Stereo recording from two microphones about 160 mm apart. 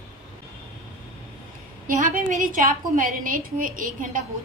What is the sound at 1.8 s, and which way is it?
A woman's voice, 55° right (ahead or behind).